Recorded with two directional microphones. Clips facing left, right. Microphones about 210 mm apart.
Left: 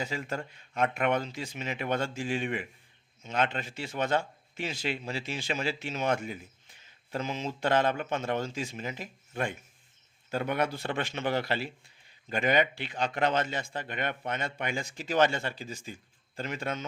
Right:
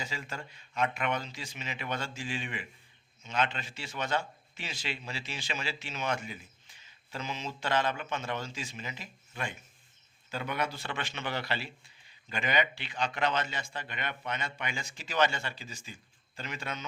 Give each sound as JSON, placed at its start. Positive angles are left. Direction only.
{"t": 0.0, "sound": "a man's voice", "side_deg": 55}